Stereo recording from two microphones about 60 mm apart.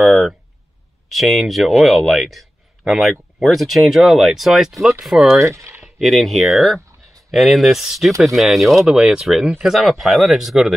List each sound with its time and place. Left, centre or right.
0.0 s a sound: centre
1.0 s speech: centre
5.3 s speech: right
5.9 s speech: centre
8.8 s speech: centre